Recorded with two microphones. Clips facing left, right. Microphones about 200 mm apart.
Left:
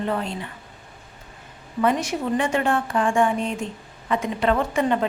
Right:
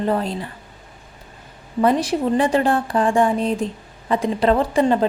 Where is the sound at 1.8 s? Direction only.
35° right (ahead or behind).